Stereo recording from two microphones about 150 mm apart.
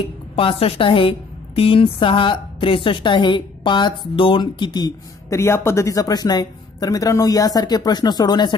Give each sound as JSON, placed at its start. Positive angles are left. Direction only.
{"t": 0.4, "sound": "a woman's voice", "side_deg": 40}